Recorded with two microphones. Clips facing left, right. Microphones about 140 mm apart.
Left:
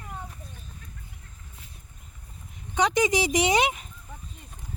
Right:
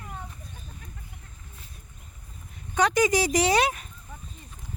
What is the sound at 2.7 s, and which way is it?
Speech, 20° left (ahead or behind).